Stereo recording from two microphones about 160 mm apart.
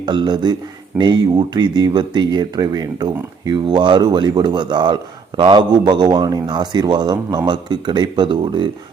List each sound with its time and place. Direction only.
0.0 s a man's voice: 30° right (ahead or behind)